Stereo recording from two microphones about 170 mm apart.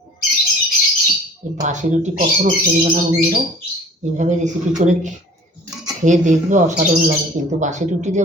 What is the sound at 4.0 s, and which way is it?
Speech, 45° right (ahead or behind).